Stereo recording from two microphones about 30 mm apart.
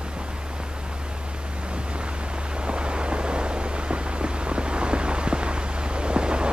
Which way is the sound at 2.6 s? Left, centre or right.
Right.